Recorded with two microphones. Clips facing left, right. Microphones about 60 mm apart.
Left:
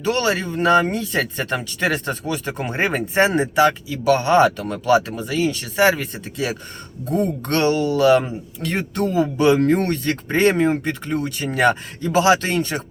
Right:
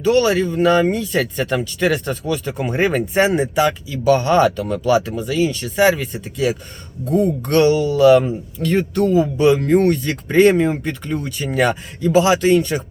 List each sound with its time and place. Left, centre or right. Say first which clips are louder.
0.0 s speech: right 5 dB; left
7.2 s speech: right 5 dB; left
9.4 s speech: right 1 dB; left